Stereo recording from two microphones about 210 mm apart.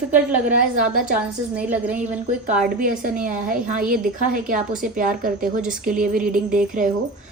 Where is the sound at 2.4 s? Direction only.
40° right (ahead or behind).